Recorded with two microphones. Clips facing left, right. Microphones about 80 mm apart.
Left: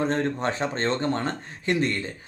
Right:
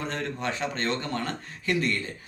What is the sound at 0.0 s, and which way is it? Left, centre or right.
Speech, left.